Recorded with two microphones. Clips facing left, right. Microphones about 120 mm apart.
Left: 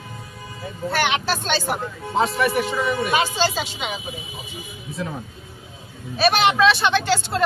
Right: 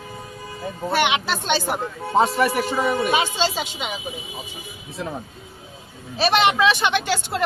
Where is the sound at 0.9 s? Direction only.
20° right (ahead or behind).